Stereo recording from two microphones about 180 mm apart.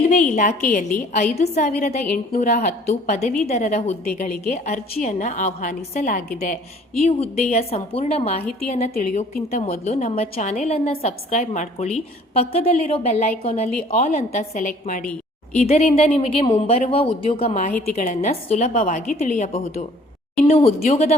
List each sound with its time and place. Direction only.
0.1 s a woman's voice: 45° left (ahead or behind)